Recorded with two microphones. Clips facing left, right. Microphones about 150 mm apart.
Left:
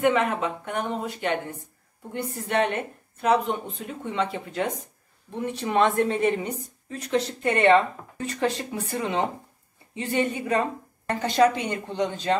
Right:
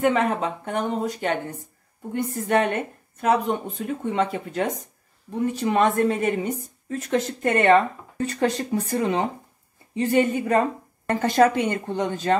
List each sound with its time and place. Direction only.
0.0 s speech: 40° right (ahead or behind)
5.3 s speech: 5° right (ahead or behind)
5.6 s speech: 40° right (ahead or behind)